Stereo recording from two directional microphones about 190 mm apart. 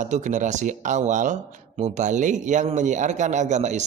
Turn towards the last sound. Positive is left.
turn(degrees=-40)  # may be behind; listen again after turning